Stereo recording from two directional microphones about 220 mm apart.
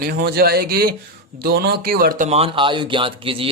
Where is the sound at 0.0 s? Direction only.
45° right (ahead or behind).